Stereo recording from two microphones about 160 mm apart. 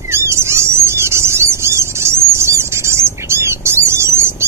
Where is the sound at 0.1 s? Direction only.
15° right (ahead or behind).